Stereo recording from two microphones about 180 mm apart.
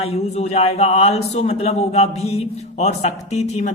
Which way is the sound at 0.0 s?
35° left (ahead or behind).